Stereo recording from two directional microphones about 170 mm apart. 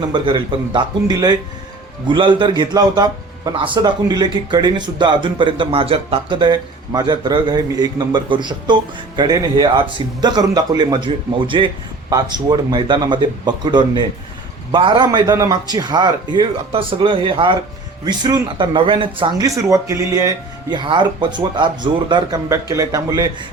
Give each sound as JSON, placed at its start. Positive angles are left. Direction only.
{"t": 0.1, "sound": "a man's voice", "side_deg": -30}